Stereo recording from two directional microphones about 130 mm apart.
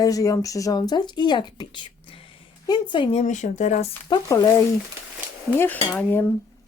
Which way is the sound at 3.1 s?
65° left (ahead or behind).